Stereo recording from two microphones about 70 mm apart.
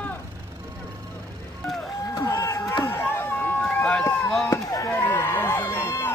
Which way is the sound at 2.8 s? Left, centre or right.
Left.